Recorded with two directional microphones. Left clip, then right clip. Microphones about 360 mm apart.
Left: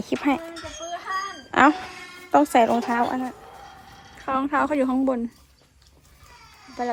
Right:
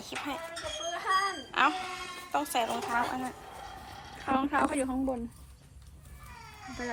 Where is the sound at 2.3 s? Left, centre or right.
Left.